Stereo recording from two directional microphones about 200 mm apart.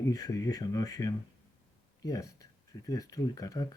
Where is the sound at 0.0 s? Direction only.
15° left (ahead or behind).